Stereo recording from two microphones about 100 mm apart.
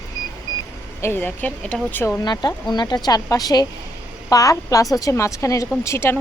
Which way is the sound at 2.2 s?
45° left (ahead or behind).